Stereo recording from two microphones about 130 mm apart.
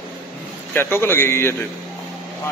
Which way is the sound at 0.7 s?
20° left (ahead or behind).